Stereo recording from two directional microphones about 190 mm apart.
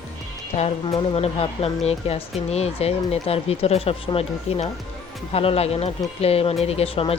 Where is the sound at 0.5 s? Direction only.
35° left (ahead or behind).